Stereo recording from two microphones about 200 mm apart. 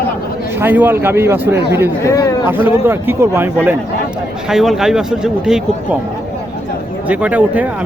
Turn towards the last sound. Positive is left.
turn(degrees=-5)  # may be behind; listen again after turning